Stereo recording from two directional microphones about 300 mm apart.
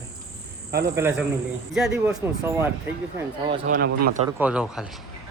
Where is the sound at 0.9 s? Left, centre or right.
Centre.